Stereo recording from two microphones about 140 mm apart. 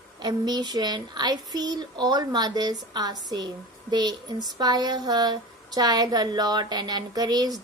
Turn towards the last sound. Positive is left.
turn(degrees=-25)  # may be behind; listen again after turning